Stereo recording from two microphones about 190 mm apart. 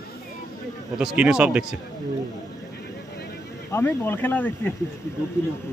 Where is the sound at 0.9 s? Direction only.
5° right (ahead or behind).